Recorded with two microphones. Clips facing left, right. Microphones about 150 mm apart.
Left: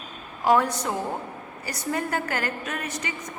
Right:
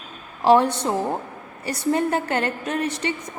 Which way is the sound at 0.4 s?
30° right (ahead or behind).